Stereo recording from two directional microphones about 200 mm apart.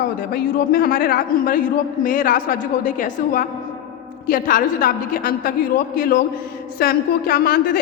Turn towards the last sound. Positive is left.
turn(degrees=50)  # may be behind; listen again after turning